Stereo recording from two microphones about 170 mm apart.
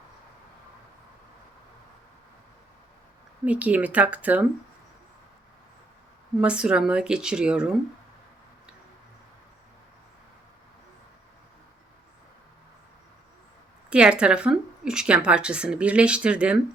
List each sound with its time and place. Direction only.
3.4 s a woman's voice: 10° right (ahead or behind)
6.4 s speech: 5° right (ahead or behind)
13.9 s a woman's voice: 5° right (ahead or behind)